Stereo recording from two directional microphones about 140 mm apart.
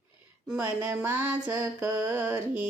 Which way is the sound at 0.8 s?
15° right (ahead or behind).